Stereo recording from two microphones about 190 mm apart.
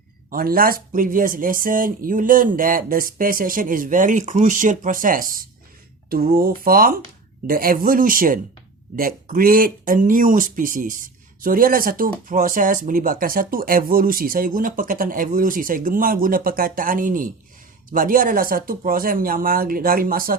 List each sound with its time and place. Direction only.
0.3 s speech: 50° right (ahead or behind)